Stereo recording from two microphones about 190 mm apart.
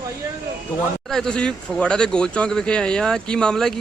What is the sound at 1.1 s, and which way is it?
Speech, 5° left (ahead or behind).